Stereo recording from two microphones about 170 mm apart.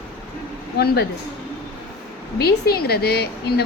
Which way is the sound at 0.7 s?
70° left (ahead or behind).